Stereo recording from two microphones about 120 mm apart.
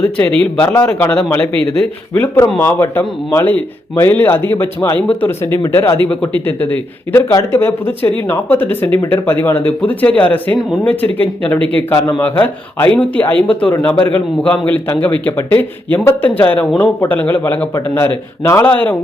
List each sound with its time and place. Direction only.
0.0 s a man's voice: 10° left (ahead or behind)